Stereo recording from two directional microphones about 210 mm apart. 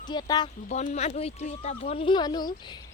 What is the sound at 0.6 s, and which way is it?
Speech, 35° left (ahead or behind).